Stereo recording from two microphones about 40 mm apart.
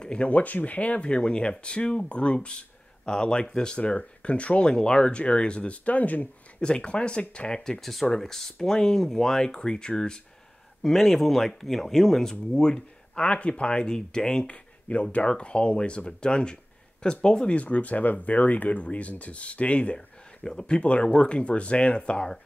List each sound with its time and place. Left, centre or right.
0.0 s speech: left
5.9 s speech: left
6.6 s speech: left
7.8 s speech: centre
10.8 s speech: centre
17.6 s speech: left